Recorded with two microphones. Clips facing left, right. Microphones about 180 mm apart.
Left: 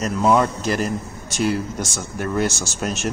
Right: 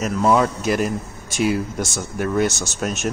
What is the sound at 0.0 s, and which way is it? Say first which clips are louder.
Speech: even; centre (ahead or behind).